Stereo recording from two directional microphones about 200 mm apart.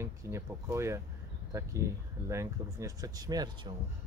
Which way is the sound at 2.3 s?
15° right (ahead or behind).